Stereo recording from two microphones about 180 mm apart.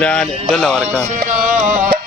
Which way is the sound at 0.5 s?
5° left (ahead or behind).